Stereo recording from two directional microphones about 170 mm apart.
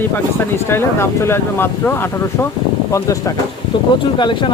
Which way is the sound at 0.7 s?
15° left (ahead or behind).